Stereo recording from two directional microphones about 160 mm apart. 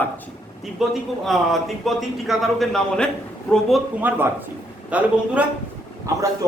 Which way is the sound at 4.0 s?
10° right (ahead or behind).